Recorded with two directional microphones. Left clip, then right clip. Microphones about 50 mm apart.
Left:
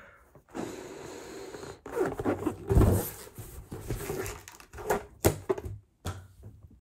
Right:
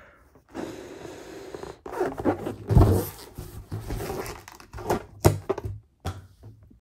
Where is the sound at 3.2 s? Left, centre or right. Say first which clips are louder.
Right 4 dB; right.